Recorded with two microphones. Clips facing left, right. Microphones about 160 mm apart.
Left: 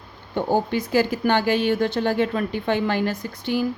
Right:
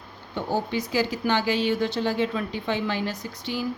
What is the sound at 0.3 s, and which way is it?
Speech, 50° left (ahead or behind).